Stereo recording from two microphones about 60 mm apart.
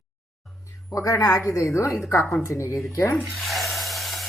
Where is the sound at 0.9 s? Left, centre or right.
Left.